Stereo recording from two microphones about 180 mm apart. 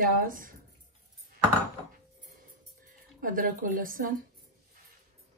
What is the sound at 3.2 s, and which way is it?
Speech, 50° right (ahead or behind).